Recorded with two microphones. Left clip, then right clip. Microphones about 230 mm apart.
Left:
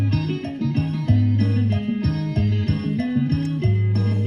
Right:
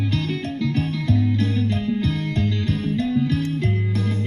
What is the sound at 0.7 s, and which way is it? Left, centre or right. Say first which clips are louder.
Music: right 1 dB; right.